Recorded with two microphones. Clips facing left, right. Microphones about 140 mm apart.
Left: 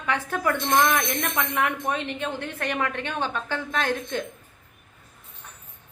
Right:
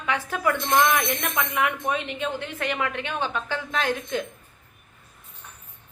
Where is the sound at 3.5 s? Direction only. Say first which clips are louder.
Even; 50° left (ahead or behind).